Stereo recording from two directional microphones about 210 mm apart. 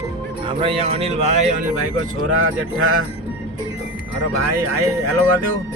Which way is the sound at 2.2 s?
70° right (ahead or behind).